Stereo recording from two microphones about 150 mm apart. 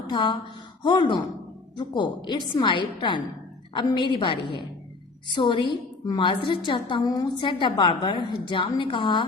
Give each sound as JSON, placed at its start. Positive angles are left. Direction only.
{"t": 0.1, "sound": "a woman's voice", "side_deg": 30}